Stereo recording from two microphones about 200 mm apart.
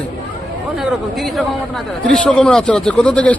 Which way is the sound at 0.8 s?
Centre (ahead or behind).